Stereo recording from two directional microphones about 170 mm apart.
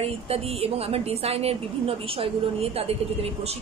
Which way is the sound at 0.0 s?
35° right (ahead or behind).